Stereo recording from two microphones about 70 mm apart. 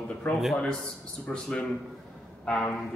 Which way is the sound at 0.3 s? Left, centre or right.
Centre.